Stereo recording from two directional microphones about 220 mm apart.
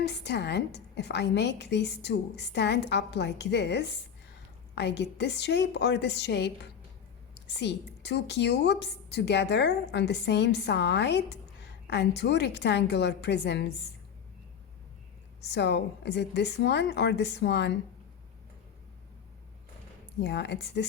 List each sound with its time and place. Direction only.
0.0 s a woman's voice: 50° left (ahead or behind)
15.4 s a woman's voice: 50° left (ahead or behind)
20.1 s a woman's voice: 50° left (ahead or behind)